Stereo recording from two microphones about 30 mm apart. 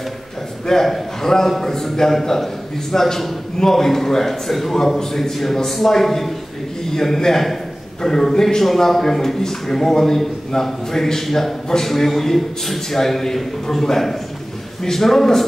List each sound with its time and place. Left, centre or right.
0.7 s a man's voice: centre
4.7 s a man's voice: centre